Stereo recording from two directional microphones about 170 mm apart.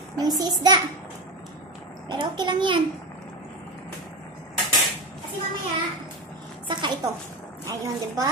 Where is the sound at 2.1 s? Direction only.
25° right (ahead or behind).